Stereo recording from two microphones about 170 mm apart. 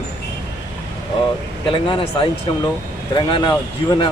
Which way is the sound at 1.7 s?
30° left (ahead or behind).